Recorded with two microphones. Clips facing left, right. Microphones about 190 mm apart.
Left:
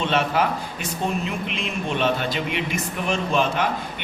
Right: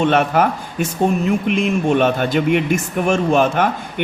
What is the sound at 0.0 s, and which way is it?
Speech, 50° right (ahead or behind).